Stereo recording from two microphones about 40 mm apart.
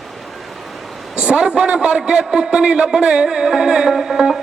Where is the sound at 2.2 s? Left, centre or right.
Centre.